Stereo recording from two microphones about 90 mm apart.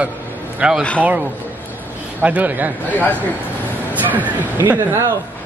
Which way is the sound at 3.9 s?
20° right (ahead or behind).